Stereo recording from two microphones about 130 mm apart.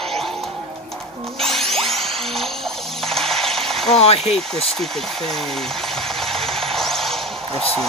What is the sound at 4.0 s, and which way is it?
Speech, 50° left (ahead or behind).